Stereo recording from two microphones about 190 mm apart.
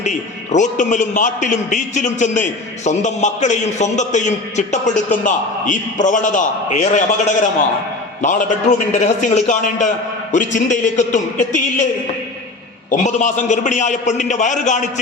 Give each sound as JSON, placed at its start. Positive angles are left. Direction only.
{"t": 0.0, "sound": "a man's voice", "side_deg": 40}
{"t": 12.9, "sound": "a man's voice", "side_deg": 40}